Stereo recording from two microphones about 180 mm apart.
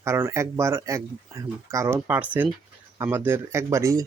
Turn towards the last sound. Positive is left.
turn(degrees=-15)  # may be behind; listen again after turning